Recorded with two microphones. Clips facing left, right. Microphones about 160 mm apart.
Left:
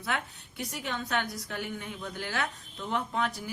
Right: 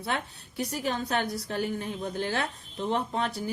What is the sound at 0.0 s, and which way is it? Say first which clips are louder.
Speech: right 2 dB; 35° right (ahead or behind).